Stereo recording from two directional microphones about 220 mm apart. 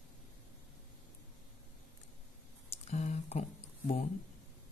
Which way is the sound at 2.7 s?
30° left (ahead or behind).